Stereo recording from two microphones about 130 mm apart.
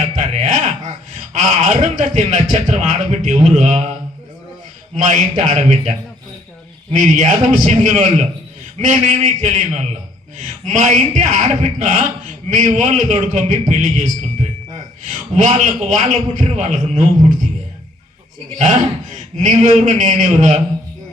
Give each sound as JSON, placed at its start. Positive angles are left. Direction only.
{"t": 0.2, "sound": "a sound", "side_deg": -70}
{"t": 1.3, "sound": "speech", "side_deg": -65}
{"t": 4.9, "sound": "speech", "side_deg": -65}
{"t": 6.9, "sound": "a man's voice", "side_deg": -65}
{"t": 15.4, "sound": "speech", "side_deg": -65}
{"t": 19.1, "sound": "a man's voice", "side_deg": -70}